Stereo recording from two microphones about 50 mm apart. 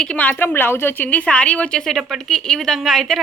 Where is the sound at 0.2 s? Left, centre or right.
Left.